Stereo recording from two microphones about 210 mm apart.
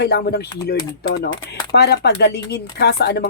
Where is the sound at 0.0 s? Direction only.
50° left (ahead or behind).